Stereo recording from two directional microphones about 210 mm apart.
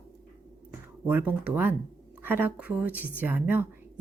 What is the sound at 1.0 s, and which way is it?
Speech, 10° right (ahead or behind).